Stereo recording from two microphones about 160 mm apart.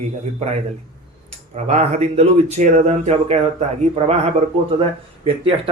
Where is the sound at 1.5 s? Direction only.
45° right (ahead or behind).